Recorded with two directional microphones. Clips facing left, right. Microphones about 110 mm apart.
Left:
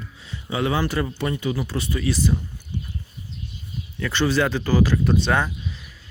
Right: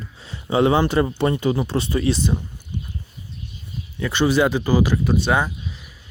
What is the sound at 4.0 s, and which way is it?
Speech, 15° right (ahead or behind).